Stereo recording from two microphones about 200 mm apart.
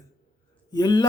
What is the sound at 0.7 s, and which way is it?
Speech, 20° left (ahead or behind).